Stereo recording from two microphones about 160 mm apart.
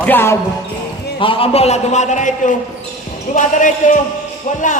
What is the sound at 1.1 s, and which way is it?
A man's voice, 35° left (ahead or behind).